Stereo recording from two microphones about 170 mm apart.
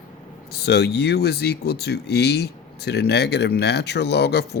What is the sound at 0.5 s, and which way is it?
Speech, 75° left (ahead or behind).